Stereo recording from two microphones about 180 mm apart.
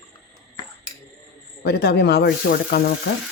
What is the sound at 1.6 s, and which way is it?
Speech, 65° left (ahead or behind).